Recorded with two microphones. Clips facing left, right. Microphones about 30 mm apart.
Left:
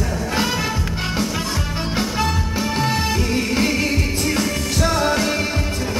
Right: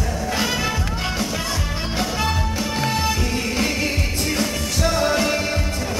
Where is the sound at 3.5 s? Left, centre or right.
Centre.